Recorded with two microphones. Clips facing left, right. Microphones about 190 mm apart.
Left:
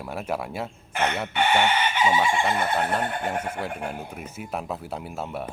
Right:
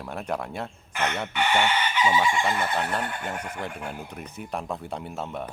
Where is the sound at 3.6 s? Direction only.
5° left (ahead or behind).